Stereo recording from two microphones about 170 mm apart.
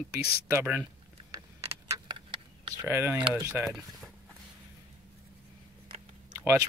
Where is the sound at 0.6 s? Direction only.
10° right (ahead or behind).